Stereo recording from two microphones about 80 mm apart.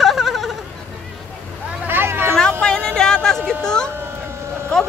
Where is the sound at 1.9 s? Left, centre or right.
Right.